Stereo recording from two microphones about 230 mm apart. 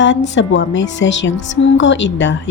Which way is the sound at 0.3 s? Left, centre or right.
Left.